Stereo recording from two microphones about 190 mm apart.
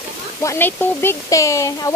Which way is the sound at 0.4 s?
15° left (ahead or behind).